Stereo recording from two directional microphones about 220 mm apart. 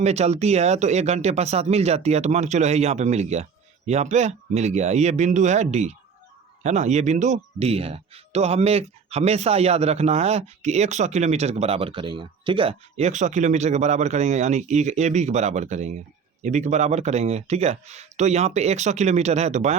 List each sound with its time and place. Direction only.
0.0 s speech: 30° right (ahead or behind)